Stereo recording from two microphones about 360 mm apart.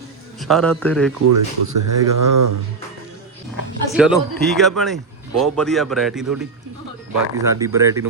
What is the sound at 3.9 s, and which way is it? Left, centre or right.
Speech, centre.